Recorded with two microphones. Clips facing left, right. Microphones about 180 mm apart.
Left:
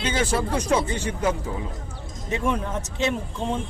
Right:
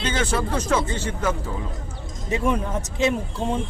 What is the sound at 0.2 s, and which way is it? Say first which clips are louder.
Speech: left 1 dB; 25° left (ahead or behind).